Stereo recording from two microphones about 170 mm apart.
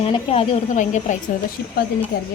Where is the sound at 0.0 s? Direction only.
35° left (ahead or behind).